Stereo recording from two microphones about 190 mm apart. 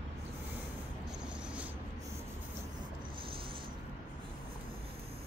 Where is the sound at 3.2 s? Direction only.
30° right (ahead or behind).